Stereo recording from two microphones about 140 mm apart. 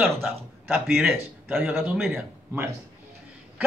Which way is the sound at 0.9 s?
10° right (ahead or behind).